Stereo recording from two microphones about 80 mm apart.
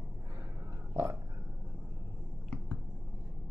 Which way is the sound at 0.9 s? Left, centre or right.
Right.